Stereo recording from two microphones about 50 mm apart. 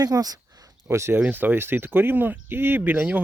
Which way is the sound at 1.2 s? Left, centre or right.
Right.